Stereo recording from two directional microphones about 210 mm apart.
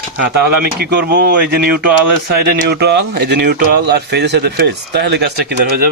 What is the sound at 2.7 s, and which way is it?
Speech, 50° right (ahead or behind).